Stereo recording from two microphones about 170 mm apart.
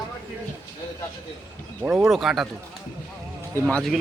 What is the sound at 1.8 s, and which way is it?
Speech, 10° right (ahead or behind).